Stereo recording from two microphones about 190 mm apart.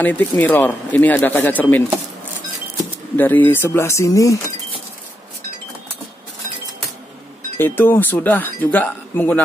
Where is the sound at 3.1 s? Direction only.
10° left (ahead or behind).